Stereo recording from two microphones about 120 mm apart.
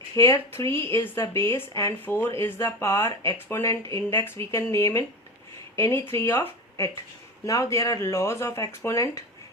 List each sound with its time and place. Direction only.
0.2 s speech: 25° left (ahead or behind)